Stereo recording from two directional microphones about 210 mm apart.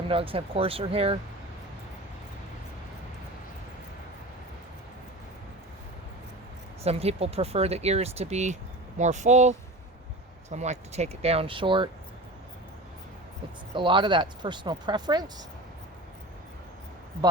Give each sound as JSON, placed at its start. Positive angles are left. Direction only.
{"t": 0.1, "sound": "speech", "side_deg": -25}
{"t": 6.8, "sound": "speech", "side_deg": -30}
{"t": 13.7, "sound": "speech", "side_deg": -20}